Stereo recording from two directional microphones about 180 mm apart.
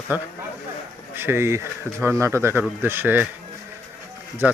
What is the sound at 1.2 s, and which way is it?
Speech, 15° right (ahead or behind).